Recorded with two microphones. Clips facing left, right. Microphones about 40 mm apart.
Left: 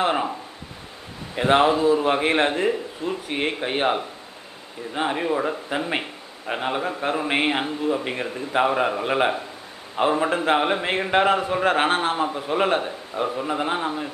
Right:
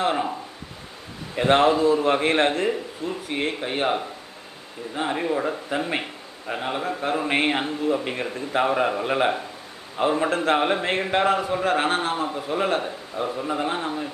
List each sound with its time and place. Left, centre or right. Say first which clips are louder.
0.0 s a sound: left 1 dB; centre
1.3 s a man's voice: even; centre
5.1 s a man's voice: right 1 dB; centre